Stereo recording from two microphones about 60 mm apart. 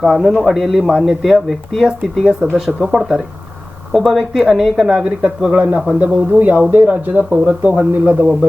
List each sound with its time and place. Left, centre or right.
0.0 s speech: centre
2.2 s a man's voice: centre
2.6 s a man's voice: centre; by 8.3 s right